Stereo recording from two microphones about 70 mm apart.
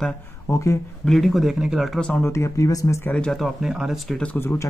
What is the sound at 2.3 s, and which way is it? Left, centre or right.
Speech, left.